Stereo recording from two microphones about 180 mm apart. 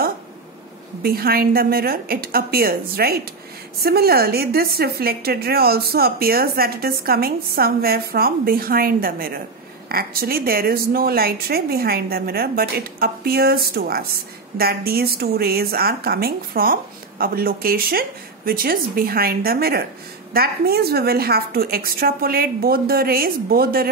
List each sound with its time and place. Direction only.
1.0 s a woman's voice: 55° right (ahead or behind)